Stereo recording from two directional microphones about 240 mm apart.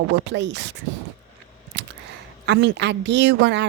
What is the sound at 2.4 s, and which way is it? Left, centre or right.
A woman's voice, right.